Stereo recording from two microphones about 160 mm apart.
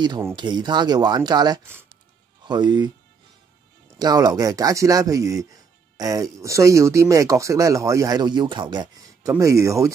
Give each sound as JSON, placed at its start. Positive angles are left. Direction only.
{"t": 0.4, "sound": "speech", "side_deg": -25}
{"t": 4.0, "sound": "speech", "side_deg": -25}